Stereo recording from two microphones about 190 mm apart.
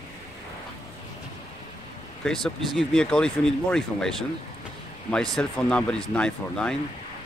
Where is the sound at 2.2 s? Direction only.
Centre (ahead or behind).